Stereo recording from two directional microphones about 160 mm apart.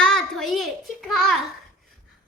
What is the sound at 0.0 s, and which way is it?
Child singing, 5° left (ahead or behind).